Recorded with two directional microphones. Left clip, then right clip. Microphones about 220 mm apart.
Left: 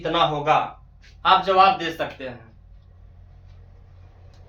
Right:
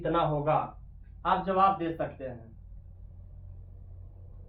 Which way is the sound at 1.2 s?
30° left (ahead or behind).